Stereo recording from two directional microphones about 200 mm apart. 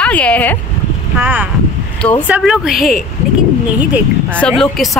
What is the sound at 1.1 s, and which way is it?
A woman's voice, 10° right (ahead or behind).